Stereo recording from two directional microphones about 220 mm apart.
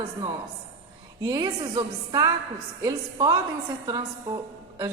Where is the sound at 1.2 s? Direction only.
15° right (ahead or behind).